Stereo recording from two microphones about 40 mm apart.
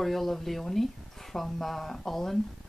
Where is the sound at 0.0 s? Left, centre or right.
Centre.